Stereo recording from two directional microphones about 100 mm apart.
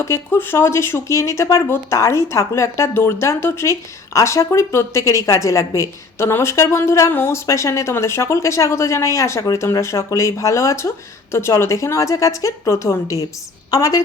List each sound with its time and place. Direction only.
0.0 s a woman's voice: 25° left (ahead or behind)